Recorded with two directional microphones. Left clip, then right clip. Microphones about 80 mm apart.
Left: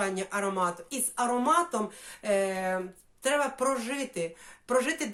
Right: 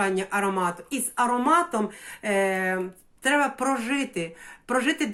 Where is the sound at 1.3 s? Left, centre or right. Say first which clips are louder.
Right 2 dB; left.